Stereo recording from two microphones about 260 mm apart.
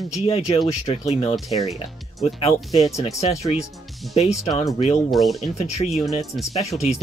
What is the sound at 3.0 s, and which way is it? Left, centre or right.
Speech, left.